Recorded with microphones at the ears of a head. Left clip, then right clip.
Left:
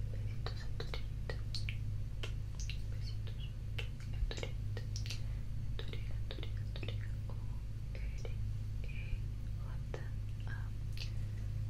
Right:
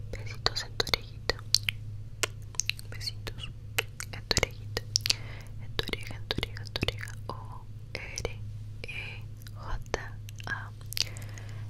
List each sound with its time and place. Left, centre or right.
0.1 s whispering: right